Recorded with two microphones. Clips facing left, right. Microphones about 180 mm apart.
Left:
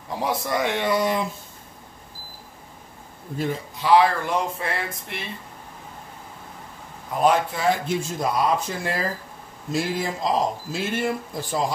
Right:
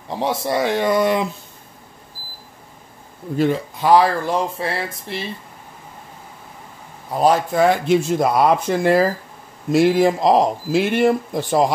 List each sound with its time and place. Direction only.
0.1 s speech: 30° right (ahead or behind)
0.9 s speech: 65° right (ahead or behind)
3.8 s speech: 40° right (ahead or behind)
7.2 s speech: 35° right (ahead or behind)
7.5 s speech: 65° right (ahead or behind)